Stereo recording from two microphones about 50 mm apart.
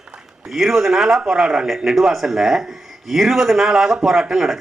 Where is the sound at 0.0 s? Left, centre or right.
Centre.